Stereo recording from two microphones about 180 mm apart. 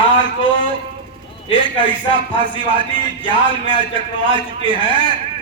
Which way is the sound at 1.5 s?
25° right (ahead or behind).